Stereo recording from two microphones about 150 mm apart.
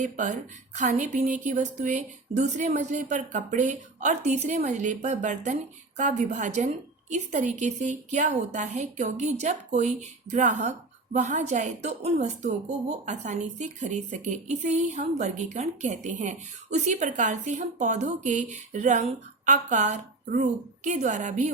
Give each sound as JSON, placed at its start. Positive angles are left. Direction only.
{"t": 0.0, "sound": "a woman's voice", "side_deg": -55}